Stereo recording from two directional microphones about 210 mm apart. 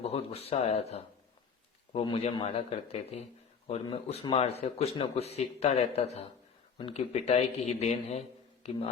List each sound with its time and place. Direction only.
0.0 s speech: 30° left (ahead or behind)